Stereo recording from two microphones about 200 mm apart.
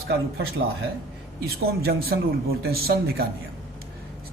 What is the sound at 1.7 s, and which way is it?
Speech, 50° right (ahead or behind).